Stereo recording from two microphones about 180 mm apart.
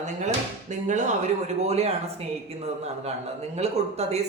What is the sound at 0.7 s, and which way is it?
Speech, 40° right (ahead or behind).